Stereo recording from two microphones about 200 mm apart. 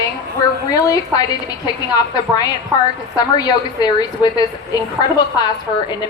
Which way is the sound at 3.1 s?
20° left (ahead or behind).